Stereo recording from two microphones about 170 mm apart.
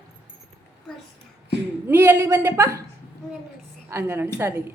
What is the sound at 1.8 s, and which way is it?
Speech, 15° right (ahead or behind).